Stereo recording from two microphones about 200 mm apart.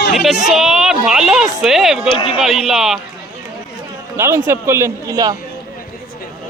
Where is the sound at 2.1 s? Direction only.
25° left (ahead or behind).